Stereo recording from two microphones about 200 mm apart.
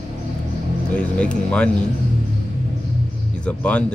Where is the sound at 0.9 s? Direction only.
5° left (ahead or behind).